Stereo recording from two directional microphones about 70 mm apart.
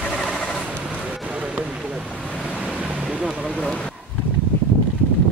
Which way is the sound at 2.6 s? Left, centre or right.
Centre.